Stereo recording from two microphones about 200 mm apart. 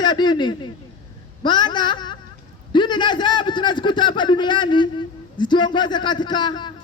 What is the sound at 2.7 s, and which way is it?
Speech, 20° left (ahead or behind).